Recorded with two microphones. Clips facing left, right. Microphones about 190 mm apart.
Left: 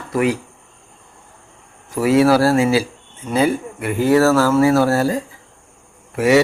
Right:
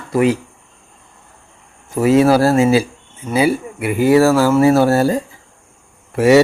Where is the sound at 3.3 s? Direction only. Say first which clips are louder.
Right 2 dB; 5° right (ahead or behind).